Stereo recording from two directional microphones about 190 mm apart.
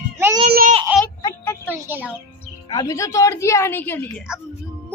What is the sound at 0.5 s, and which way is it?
Baby cry, 50° right (ahead or behind).